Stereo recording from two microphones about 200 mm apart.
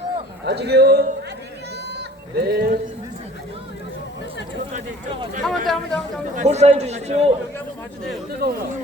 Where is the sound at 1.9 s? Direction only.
55° right (ahead or behind).